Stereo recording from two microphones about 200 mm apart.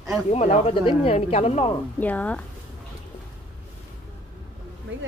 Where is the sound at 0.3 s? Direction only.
30° left (ahead or behind).